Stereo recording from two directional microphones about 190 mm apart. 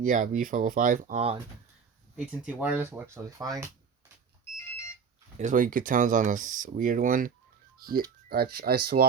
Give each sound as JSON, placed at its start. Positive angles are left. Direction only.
{"t": 0.0, "sound": "speech", "side_deg": -45}
{"t": 2.1, "sound": "speech", "side_deg": -5}
{"t": 5.4, "sound": "speech", "side_deg": -45}